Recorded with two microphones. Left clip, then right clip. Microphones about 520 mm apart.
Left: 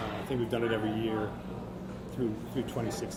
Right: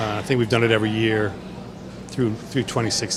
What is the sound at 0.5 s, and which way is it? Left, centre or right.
Speech, right.